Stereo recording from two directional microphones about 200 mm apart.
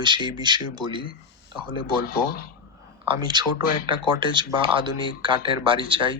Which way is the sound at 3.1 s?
25° right (ahead or behind).